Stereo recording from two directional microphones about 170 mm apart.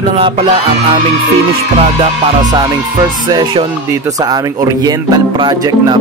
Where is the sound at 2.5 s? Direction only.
25° right (ahead or behind).